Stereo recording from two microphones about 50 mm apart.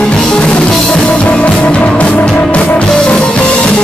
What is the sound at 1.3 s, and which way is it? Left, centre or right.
Music, left.